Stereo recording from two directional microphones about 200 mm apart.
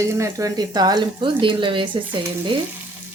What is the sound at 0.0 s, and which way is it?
A woman's voice, 15° right (ahead or behind).